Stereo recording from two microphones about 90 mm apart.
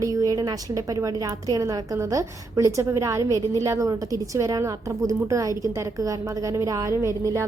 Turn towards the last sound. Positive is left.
turn(degrees=-35)  # may be behind; listen again after turning